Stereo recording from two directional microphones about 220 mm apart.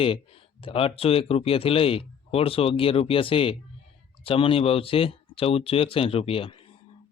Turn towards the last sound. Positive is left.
turn(degrees=25)  # may be behind; listen again after turning